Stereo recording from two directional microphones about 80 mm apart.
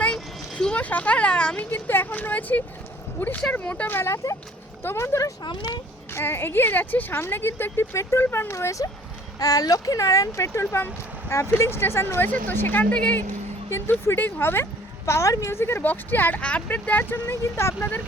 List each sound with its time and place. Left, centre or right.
0.0 s a sound: centre
1.7 s speech: left
4.1 s speech: left
4.8 s speech: left
5.4 s speech: left
6.1 s speech: left
12.9 s speech: centre
13.7 s speech: left